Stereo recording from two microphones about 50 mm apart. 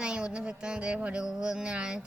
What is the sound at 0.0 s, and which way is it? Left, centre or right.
Music, centre.